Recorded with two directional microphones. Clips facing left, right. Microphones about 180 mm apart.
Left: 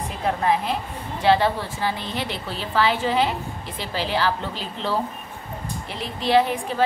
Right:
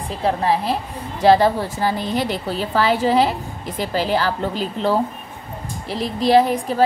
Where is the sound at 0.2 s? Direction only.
30° right (ahead or behind).